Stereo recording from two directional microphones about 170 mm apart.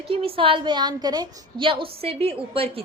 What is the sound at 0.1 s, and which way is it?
A woman's voice, 35° right (ahead or behind).